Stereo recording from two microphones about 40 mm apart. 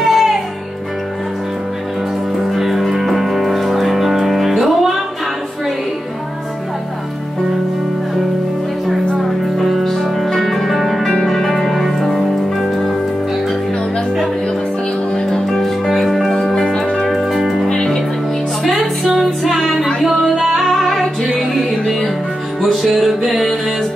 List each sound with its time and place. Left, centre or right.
0.0 s music: centre
2.5 s music: centre
9.6 s music: centre
15.1 s music: centre
17.1 s music: centre
19.0 s music: centre